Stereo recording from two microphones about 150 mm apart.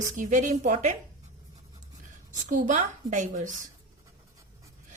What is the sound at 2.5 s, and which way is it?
A woman's voice, 60° right (ahead or behind).